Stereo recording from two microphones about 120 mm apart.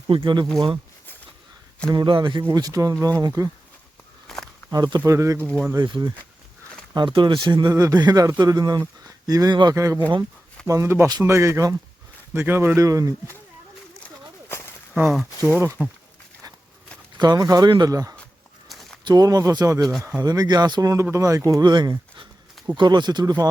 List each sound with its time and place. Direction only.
0.1 s speech: 45° right (ahead or behind)
1.9 s speech: 40° right (ahead or behind)
2.5 s speech: 30° right (ahead or behind)
4.3 s walk: 5° left (ahead or behind)
4.7 s speech: 35° right (ahead or behind)
5.7 s speech: 35° right (ahead or behind)
7.7 s speech: 25° right (ahead or behind)
9.7 s speech: 25° right (ahead or behind)
15.4 s speech: 20° right (ahead or behind)
17.2 s speech: 35° right (ahead or behind)
18.7 s a sound: centre (ahead or behind)
19.0 s speech: 35° right (ahead or behind)